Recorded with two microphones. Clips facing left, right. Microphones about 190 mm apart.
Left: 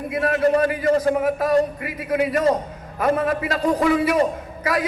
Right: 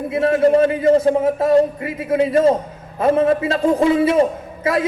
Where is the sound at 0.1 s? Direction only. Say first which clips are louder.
Right 5 dB; 25° right (ahead or behind).